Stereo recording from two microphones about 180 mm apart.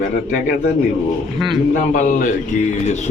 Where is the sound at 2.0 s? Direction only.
45° left (ahead or behind).